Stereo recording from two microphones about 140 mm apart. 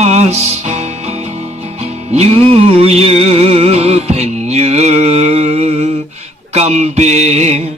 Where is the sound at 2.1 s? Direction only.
45° right (ahead or behind).